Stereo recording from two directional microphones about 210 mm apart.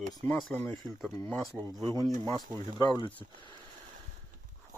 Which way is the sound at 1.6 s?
20° right (ahead or behind).